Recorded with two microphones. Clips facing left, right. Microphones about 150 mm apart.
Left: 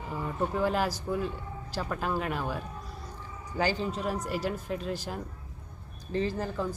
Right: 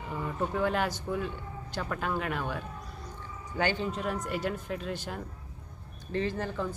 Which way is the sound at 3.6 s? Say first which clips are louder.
Left 1 dB; 35° left (ahead or behind).